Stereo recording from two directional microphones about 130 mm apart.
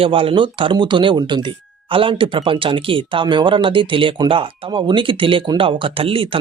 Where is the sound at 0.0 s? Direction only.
45° right (ahead or behind).